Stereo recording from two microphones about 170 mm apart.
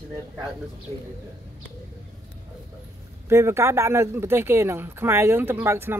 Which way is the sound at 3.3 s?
15° right (ahead or behind).